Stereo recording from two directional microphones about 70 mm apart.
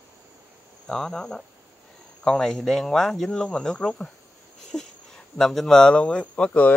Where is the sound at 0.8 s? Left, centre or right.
Centre.